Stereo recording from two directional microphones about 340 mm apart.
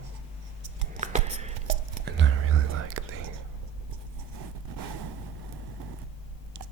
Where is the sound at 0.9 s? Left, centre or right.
Right.